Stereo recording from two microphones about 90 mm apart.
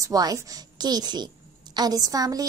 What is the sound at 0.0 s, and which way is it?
A woman's voice, 45° right (ahead or behind).